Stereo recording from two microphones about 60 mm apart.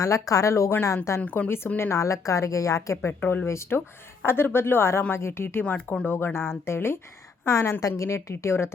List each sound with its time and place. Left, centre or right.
0.0 s a woman's voice: left
1.2 s speech: left
1.5 s speech: left
2.0 s a woman's voice: left
3.1 s speech: left
7.8 s a woman's voice: left